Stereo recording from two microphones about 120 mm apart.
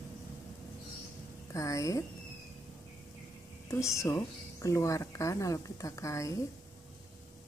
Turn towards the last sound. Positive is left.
turn(degrees=25)  # may be behind; listen again after turning